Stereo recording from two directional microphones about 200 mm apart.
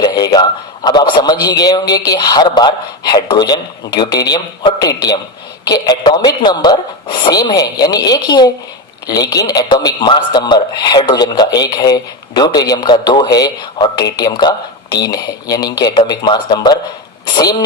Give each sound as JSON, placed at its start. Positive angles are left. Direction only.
{"t": 0.0, "sound": "a man's voice", "side_deg": 20}